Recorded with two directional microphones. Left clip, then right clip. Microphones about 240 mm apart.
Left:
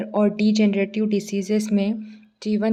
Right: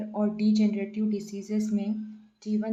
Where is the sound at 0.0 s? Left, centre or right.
Left.